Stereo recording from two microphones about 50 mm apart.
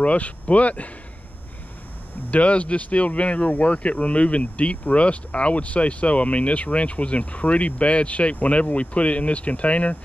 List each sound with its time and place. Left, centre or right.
0.0 s speech: left
2.3 s speech: left